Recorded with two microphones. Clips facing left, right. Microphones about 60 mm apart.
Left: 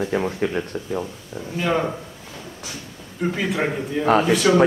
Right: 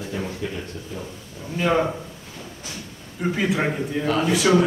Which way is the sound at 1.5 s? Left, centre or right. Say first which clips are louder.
Right 1 dB; centre.